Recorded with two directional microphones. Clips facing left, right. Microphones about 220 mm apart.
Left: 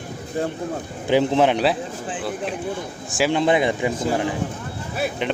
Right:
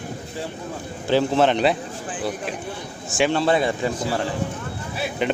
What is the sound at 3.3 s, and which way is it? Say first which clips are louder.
Speech: left 4 dB; 15° left (ahead or behind).